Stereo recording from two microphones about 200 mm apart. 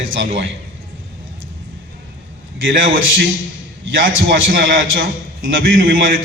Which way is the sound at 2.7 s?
70° right (ahead or behind).